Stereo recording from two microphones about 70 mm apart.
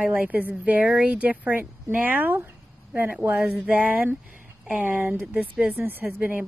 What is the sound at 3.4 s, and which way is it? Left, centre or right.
Speech, centre.